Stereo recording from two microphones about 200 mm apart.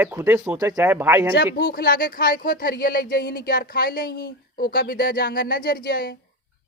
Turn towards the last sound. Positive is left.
turn(degrees=45)  # may be behind; listen again after turning